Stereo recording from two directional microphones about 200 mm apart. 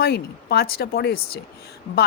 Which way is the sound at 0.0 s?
50° left (ahead or behind).